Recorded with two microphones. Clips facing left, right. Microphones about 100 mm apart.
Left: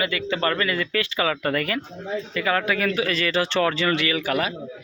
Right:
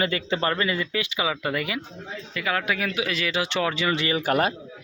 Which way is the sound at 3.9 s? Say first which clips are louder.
Even; 30° right (ahead or behind).